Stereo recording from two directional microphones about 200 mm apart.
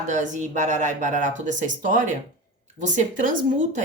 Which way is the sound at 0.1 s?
40° right (ahead or behind).